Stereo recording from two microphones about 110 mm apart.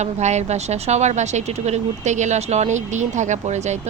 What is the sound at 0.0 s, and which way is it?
A woman's voice, 90° right.